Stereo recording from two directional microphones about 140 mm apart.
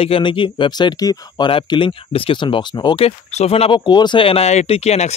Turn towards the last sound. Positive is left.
turn(degrees=50)  # may be behind; listen again after turning